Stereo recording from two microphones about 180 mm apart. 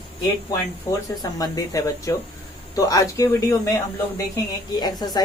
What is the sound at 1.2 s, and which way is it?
Speech, 20° left (ahead or behind).